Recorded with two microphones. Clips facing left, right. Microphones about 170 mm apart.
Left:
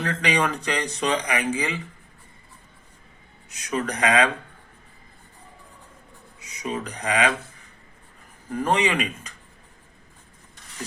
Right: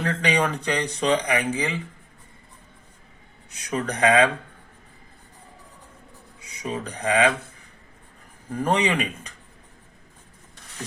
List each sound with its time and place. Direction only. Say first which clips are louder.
0.0 s speech: right 1 dB; 30° right (ahead or behind)
3.7 s speech: right 2 dB; 30° right (ahead or behind)
6.4 s speech: left 1 dB; 30° right (ahead or behind)
8.7 s speech: even; 30° right (ahead or behind)